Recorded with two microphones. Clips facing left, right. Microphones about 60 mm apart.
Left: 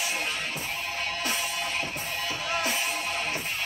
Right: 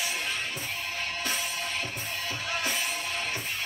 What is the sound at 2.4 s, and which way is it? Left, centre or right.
Music, left.